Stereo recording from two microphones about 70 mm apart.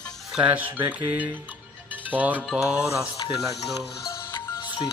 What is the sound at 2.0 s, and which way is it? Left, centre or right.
Music, right.